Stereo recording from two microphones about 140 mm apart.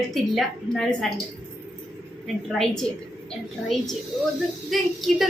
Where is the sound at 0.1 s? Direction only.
Centre (ahead or behind).